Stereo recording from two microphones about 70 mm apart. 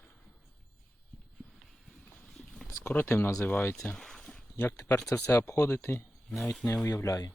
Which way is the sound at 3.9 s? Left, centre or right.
Centre.